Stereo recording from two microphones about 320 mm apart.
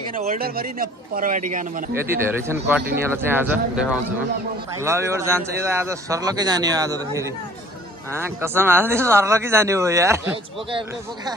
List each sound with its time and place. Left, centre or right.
0.1 s speech: right
2.0 s speech: centre